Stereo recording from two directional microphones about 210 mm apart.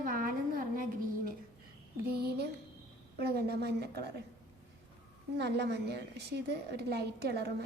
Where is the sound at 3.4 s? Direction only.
50° right (ahead or behind).